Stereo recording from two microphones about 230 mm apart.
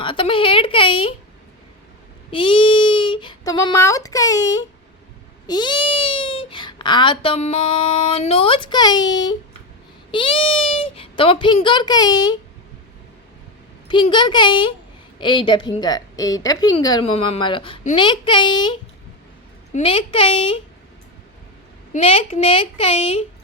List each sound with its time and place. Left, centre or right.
0.0 s a sound: left
2.3 s a sound: left
5.5 s cat: centre
8.1 s a woman's voice: left
13.8 s a woman's voice: left
21.9 s a woman's voice: left